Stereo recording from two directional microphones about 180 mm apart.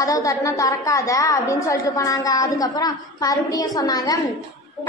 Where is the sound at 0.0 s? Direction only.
20° left (ahead or behind).